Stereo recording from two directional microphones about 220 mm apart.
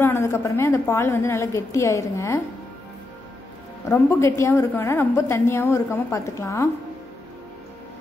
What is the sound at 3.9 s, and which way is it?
A woman's voice, 10° left (ahead or behind).